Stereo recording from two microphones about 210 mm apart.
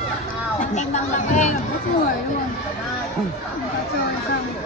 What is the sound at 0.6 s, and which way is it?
Speech, 35° left (ahead or behind).